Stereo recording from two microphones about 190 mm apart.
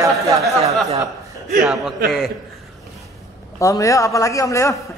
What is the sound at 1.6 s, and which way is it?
Speech, centre (ahead or behind).